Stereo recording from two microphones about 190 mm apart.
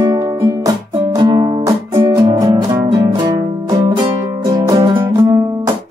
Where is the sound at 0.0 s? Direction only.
20° right (ahead or behind).